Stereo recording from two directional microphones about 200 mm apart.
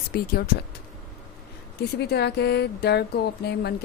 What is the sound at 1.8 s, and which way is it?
A woman's voice, 55° left (ahead or behind).